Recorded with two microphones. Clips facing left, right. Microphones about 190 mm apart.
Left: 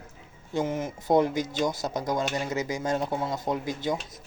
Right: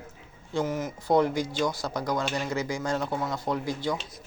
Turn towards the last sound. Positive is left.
turn(degrees=20)  # may be behind; listen again after turning